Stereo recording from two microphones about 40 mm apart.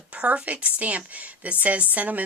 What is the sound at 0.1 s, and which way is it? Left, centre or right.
Speech, right.